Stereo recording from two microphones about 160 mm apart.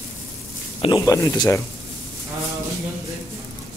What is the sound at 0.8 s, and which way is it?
Speech, 25° left (ahead or behind).